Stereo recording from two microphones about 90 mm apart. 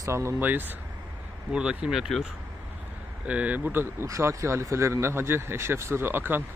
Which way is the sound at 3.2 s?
15° right (ahead or behind).